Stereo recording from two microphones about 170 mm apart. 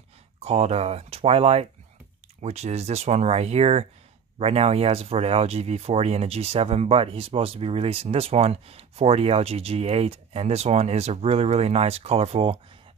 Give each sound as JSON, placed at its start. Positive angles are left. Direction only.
{"t": 0.4, "sound": "speech", "side_deg": -40}